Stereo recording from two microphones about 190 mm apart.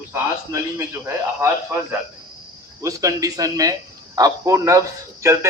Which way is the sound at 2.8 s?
15° right (ahead or behind).